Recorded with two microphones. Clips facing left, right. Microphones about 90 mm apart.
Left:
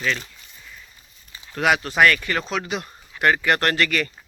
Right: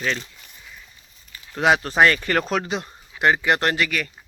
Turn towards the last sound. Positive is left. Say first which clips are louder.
# left 3 dB
turn(degrees=-5)  # may be behind; listen again after turning